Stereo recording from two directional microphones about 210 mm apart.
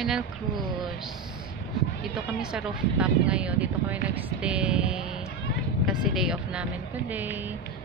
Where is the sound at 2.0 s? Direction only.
Centre (ahead or behind).